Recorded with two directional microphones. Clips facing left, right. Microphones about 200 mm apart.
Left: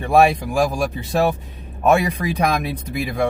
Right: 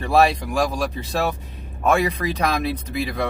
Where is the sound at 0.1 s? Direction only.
15° left (ahead or behind).